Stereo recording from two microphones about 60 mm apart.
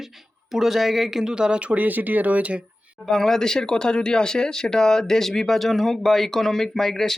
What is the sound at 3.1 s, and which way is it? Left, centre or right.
Speech, centre.